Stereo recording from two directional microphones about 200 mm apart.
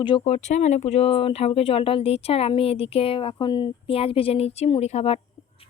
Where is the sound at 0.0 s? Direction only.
30° left (ahead or behind).